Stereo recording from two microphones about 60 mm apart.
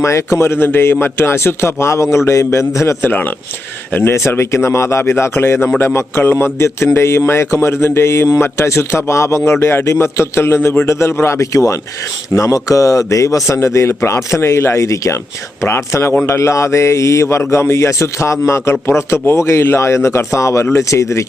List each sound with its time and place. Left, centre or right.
0.0 s a man's voice: left
3.0 s speech: left
4.3 s a man's voice: left
9.5 s a man's voice: left
13.7 s a man's voice: left
15.6 s a man's voice: left